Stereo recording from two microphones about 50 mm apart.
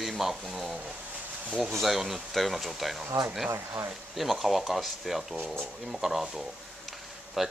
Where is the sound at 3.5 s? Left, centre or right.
Right.